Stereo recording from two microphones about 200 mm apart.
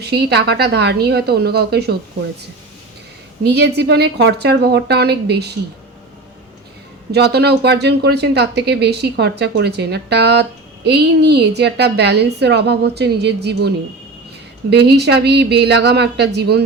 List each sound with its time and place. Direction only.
0.0 s speech: 55° right (ahead or behind)
3.4 s speech: 55° right (ahead or behind)
7.1 s speech: 55° right (ahead or behind)